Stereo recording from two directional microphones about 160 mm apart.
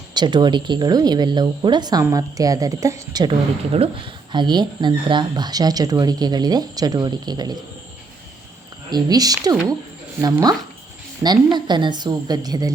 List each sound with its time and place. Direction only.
0.1 s speech: 25° right (ahead or behind)
3.7 s speech: 35° right (ahead or behind)
8.9 s speech: 25° right (ahead or behind)